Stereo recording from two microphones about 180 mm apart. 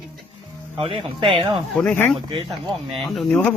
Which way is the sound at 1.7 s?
10° left (ahead or behind).